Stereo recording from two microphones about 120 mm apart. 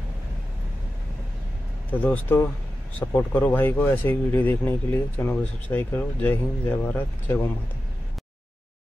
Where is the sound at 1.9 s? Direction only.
15° left (ahead or behind).